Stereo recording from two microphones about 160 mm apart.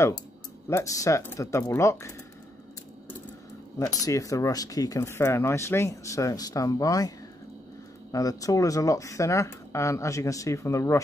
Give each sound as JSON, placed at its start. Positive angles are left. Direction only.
{"t": 0.7, "sound": "speech", "side_deg": 20}
{"t": 3.7, "sound": "speech", "side_deg": 20}